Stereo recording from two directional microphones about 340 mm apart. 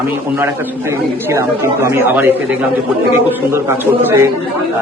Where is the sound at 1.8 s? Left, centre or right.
Centre.